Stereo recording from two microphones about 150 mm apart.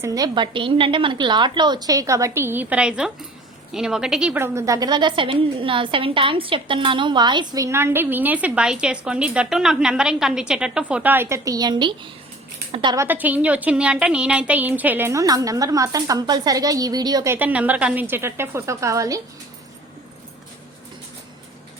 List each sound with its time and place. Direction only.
0.0 s a woman's voice: 25° right (ahead or behind)
13.0 s a woman's voice: 10° right (ahead or behind)
17.3 s a woman's voice: 10° right (ahead or behind)